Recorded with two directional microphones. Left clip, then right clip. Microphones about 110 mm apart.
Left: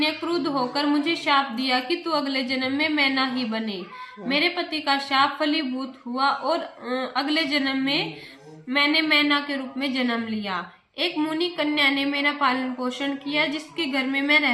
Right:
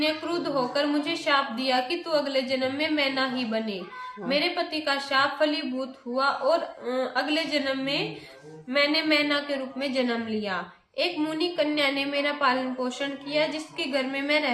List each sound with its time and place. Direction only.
0.7 s a woman's voice: 40° right (ahead or behind)